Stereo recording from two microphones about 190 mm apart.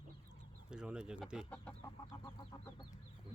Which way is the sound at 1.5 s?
10° left (ahead or behind).